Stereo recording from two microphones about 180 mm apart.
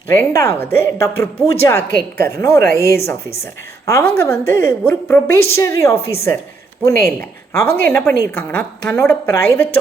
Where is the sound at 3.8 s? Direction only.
15° left (ahead or behind).